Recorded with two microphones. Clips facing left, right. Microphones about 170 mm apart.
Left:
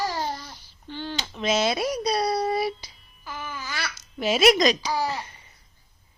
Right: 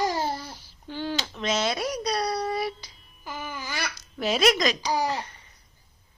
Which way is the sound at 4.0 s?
Centre (ahead or behind).